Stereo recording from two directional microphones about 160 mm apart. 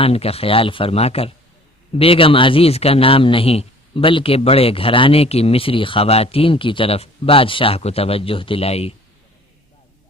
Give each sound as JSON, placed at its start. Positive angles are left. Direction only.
{"t": 0.0, "sound": "a man's voice", "side_deg": 40}